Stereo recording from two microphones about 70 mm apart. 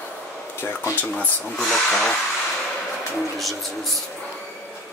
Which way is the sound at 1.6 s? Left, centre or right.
Centre.